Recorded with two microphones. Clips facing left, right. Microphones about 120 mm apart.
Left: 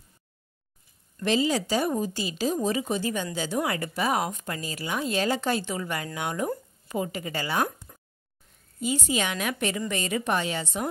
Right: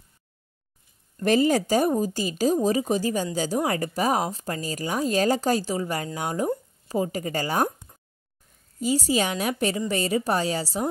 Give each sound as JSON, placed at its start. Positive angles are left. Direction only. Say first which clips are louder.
{"t": 1.2, "sound": "speech", "louder": "right 4 dB", "side_deg": -50}
{"t": 8.7, "sound": "speech", "louder": "right 4 dB", "side_deg": -35}